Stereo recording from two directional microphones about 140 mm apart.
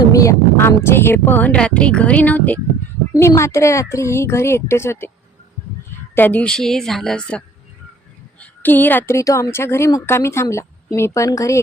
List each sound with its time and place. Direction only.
0.0 s a woman's voice: 25° left (ahead or behind)
6.1 s a woman's voice: 15° left (ahead or behind)